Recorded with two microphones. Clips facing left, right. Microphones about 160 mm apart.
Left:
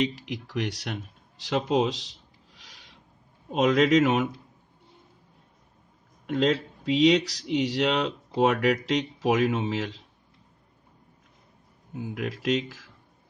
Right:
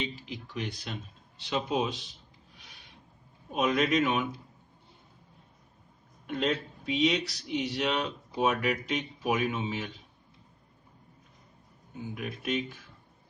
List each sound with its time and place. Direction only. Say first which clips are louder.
0.0 s speech: left 8 dB; 85° left
1.4 s a sound: left 5 dB; 80° left
3.5 s speech: left 6 dB; 90° left
6.2 s speech: left 6 dB; 90° left
11.9 s speech: left 5 dB; 80° left